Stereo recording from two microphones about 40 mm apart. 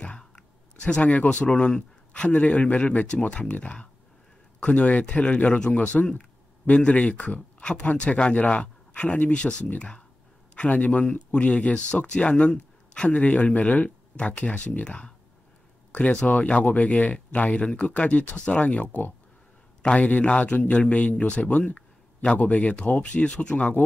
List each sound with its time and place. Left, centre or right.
0.7 s a man's voice: left
3.1 s speech: left
6.1 s a sound: left
6.8 s a man's voice: left
10.5 s a sound: left
11.0 s speech: left
14.9 s speech: left
20.0 s speech: left
23.1 s speech: left